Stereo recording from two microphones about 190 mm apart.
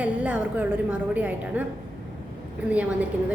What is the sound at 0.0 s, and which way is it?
A woman's voice, 5° right (ahead or behind).